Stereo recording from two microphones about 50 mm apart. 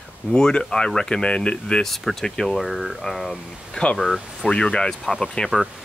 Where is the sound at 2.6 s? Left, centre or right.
Centre.